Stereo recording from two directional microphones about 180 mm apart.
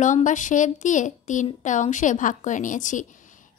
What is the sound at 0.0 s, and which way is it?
A woman's voice, 45° left (ahead or behind).